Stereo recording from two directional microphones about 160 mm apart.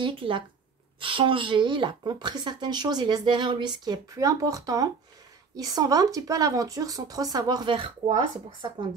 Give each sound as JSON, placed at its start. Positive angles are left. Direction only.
{"t": 0.0, "sound": "speech", "side_deg": -30}